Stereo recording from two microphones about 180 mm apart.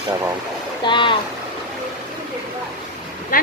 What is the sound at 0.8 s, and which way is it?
Speech, 25° left (ahead or behind).